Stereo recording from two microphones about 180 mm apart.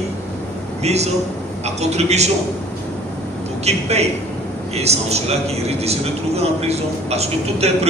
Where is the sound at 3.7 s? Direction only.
35° right (ahead or behind).